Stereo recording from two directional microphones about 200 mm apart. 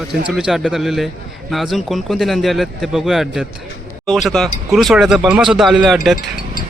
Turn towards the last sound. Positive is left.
turn(degrees=0)  # may be behind; listen again after turning